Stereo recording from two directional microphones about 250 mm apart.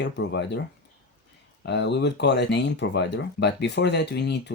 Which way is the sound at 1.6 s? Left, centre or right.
Left.